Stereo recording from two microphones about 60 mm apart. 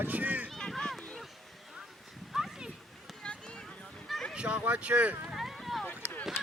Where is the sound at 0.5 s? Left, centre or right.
Centre.